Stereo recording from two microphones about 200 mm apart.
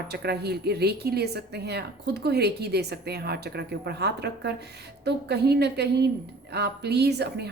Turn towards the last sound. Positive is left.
turn(degrees=-55)  # may be behind; listen again after turning